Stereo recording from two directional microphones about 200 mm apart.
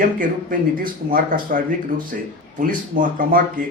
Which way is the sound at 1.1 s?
45° right (ahead or behind).